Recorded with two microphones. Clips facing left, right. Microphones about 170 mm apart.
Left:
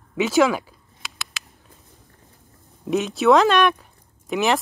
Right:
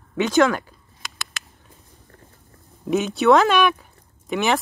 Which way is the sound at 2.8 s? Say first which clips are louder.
Even; centre (ahead or behind).